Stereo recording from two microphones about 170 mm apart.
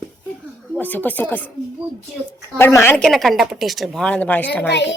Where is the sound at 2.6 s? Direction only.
15° left (ahead or behind).